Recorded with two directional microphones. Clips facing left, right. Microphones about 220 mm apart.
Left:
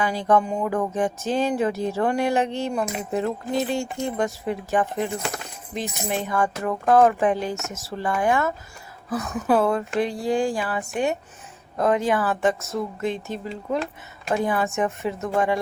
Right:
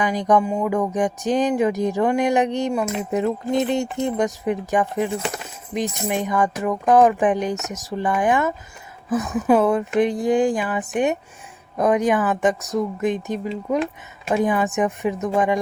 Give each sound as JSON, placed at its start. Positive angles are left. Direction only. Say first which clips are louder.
{"t": 0.0, "sound": "music", "louder": "right 2 dB", "side_deg": -15}